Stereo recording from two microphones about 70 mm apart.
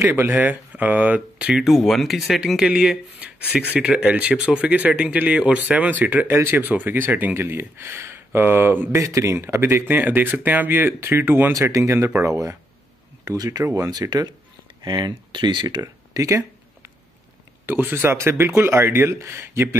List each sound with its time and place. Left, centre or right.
0.0 s speech: right
0.3 s speech: right
1.5 s speech: centre
2.7 s speech: centre
8.9 s speech: right
11.5 s speech: right
13.8 s speech: right
14.8 s speech: right
17.6 s speech: right